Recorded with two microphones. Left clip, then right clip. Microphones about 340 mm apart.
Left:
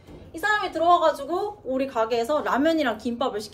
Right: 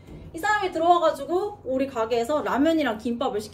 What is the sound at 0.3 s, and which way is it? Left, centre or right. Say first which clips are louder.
A woman's voice: even; centre.